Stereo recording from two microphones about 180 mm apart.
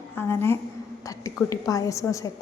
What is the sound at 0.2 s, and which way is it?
A woman's voice, 15° left (ahead or behind).